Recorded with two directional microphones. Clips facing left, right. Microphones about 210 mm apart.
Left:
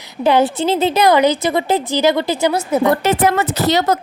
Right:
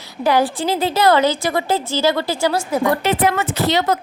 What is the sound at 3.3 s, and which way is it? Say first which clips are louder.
Speech: left 3 dB; 40° left (ahead or behind).